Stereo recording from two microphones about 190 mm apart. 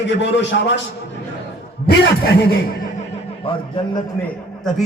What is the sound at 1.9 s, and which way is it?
Speech, 60° left (ahead or behind).